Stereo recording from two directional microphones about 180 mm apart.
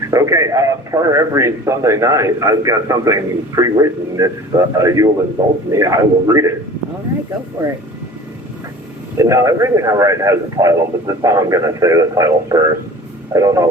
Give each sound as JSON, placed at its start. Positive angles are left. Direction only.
{"t": 0.1, "sound": "speech", "side_deg": -15}
{"t": 9.1, "sound": "speech", "side_deg": -15}